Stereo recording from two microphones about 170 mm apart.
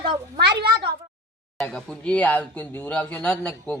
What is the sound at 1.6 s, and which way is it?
Speech, 5° left (ahead or behind).